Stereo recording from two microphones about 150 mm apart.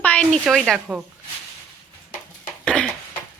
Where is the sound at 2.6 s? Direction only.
5° left (ahead or behind).